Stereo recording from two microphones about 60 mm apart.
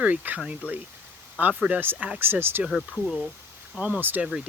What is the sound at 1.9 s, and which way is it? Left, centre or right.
Speech, right.